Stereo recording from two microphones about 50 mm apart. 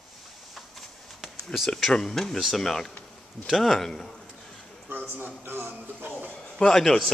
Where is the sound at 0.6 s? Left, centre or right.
Centre.